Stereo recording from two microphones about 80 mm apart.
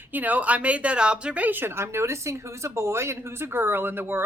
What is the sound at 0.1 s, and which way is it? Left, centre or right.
Speech, right.